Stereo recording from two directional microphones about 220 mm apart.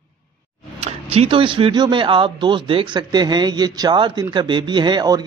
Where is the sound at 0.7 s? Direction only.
30° right (ahead or behind).